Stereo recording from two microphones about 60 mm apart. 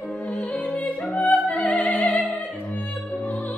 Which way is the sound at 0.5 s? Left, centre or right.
Left.